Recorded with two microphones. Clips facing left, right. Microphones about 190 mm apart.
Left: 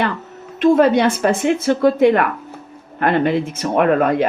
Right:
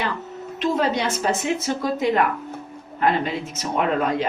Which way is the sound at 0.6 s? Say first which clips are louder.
Left 9 dB; 55° left (ahead or behind).